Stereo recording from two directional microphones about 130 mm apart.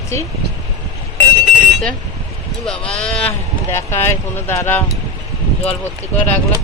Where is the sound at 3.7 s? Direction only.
20° left (ahead or behind).